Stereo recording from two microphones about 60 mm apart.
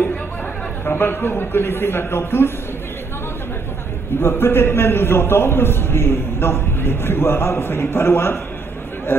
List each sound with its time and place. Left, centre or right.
0.8 s a man's voice: left
4.2 s a man's voice: left